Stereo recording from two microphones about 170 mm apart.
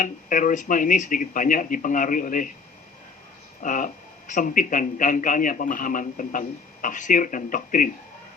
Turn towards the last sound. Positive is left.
turn(degrees=50)  # may be behind; listen again after turning